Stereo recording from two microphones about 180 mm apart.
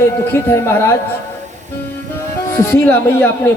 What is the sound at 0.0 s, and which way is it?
Speech, 15° left (ahead or behind).